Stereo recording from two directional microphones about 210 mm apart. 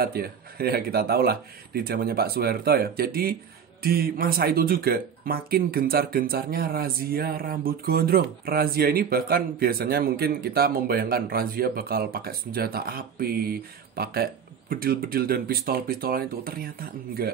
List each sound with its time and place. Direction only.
0.0 s speech: 45° right (ahead or behind)